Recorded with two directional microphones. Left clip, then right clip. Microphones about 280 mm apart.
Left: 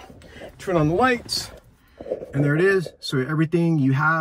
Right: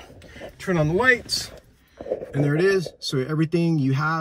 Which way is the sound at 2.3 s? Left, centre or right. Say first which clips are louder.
Left 1 dB; centre.